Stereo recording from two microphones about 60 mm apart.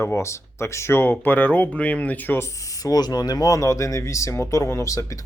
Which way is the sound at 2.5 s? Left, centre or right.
Left.